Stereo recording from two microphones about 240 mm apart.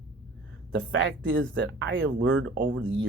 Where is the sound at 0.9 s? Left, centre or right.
Right.